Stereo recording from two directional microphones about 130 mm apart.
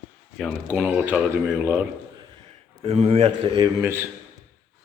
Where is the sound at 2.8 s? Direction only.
50° right (ahead or behind).